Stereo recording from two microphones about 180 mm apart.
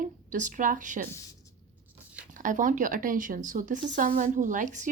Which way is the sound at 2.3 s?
45° right (ahead or behind).